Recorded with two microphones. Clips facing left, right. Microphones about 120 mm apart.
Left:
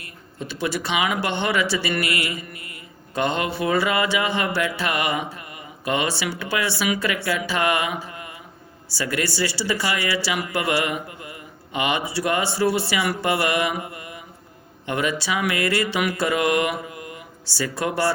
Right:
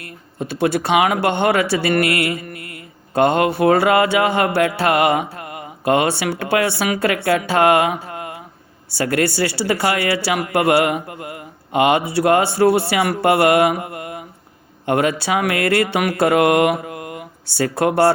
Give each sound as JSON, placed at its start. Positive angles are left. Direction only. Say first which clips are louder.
{"t": 0.0, "sound": "speech", "louder": "right 6 dB", "side_deg": -55}